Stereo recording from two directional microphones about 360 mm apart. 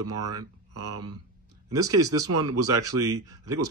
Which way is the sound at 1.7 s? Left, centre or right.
Centre.